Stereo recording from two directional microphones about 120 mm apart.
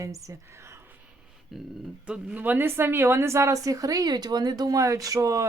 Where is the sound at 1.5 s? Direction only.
Centre (ahead or behind).